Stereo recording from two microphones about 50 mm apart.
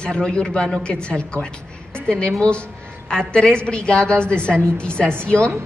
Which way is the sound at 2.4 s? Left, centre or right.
Left.